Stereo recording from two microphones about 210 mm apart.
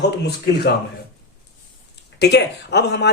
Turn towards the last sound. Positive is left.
turn(degrees=55)  # may be behind; listen again after turning